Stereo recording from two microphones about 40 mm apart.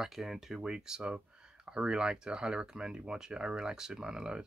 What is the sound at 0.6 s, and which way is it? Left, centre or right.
Speech, centre.